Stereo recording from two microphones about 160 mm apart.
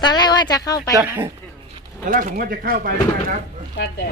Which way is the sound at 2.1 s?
60° right (ahead or behind).